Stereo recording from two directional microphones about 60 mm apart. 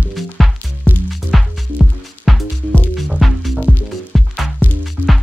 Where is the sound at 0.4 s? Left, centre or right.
Centre.